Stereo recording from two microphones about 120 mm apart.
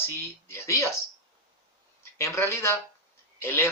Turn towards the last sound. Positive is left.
turn(degrees=20)  # may be behind; listen again after turning